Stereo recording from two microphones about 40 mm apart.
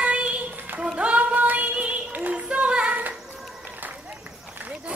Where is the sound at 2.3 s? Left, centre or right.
Right.